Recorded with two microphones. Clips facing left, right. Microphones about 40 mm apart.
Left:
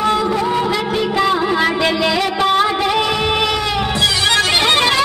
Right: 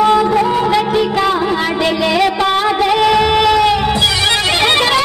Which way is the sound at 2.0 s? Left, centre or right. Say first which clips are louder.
Right 4 dB; right.